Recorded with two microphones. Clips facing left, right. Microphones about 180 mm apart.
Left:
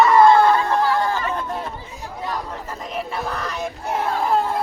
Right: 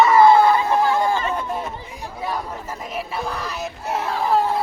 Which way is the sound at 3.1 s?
5° right (ahead or behind).